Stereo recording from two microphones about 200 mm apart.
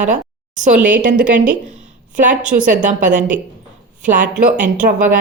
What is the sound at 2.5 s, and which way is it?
Speech, 40° right (ahead or behind).